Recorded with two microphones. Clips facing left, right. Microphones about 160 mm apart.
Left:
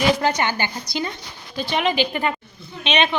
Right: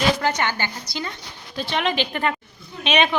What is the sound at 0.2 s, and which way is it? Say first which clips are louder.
Speech: left 2 dB; 15° left (ahead or behind).